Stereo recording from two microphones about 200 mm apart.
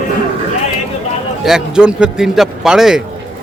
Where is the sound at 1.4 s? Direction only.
5° right (ahead or behind).